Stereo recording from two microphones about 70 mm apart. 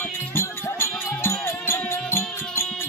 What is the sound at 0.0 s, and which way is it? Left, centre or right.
Music, left.